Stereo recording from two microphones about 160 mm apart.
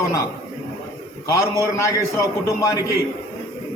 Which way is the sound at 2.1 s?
20° left (ahead or behind).